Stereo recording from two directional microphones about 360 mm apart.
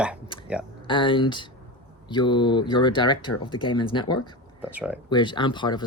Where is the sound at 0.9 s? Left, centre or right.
Centre.